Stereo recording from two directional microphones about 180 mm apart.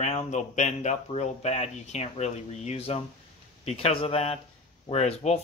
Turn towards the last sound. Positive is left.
turn(degrees=35)  # may be behind; listen again after turning